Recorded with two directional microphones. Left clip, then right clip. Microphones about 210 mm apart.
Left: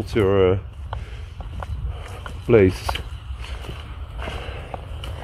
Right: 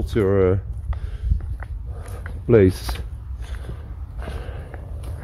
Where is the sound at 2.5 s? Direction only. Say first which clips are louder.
Even; 5° right (ahead or behind).